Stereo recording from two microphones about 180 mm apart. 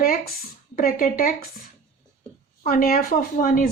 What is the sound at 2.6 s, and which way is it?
Speech, 55° left (ahead or behind).